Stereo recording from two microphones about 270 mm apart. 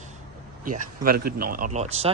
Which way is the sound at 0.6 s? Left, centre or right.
Right.